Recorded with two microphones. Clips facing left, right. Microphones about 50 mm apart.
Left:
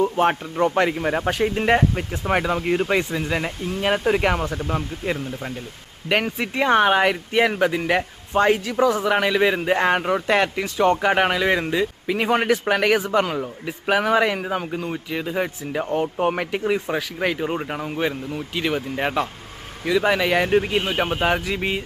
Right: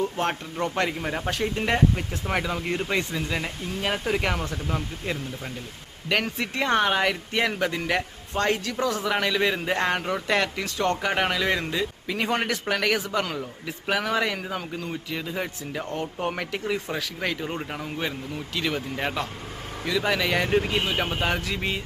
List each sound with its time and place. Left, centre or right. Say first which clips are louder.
0.0 s speech: left 7 dB; centre